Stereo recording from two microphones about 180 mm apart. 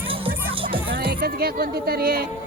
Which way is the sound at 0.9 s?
55° right (ahead or behind).